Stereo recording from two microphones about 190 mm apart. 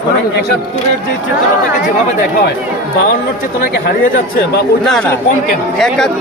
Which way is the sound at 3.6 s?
50° left (ahead or behind).